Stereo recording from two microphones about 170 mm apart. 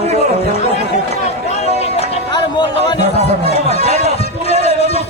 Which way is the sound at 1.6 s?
35° left (ahead or behind).